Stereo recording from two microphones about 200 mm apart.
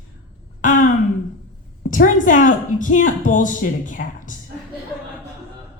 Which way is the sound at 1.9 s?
40° left (ahead or behind).